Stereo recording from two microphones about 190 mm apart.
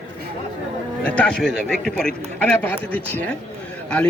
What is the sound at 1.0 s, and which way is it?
A man's voice, 5° left (ahead or behind).